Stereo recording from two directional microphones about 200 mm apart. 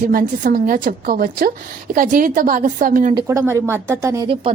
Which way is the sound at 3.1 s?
15° right (ahead or behind).